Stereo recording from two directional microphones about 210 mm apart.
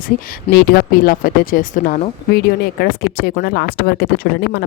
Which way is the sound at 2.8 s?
50° left (ahead or behind).